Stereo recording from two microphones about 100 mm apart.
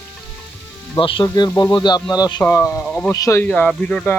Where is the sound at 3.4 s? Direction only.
15° left (ahead or behind).